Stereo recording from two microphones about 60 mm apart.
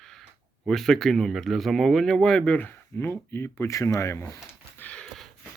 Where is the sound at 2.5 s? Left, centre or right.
Left.